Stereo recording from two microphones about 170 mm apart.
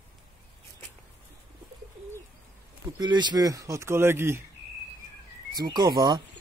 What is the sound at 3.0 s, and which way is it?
Speech, 25° right (ahead or behind).